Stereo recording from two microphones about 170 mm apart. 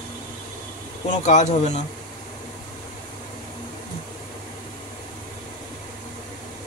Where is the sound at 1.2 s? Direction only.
40° left (ahead or behind).